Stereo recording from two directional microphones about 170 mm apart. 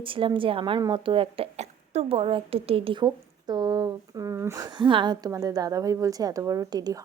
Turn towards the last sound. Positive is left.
turn(degrees=-20)  # may be behind; listen again after turning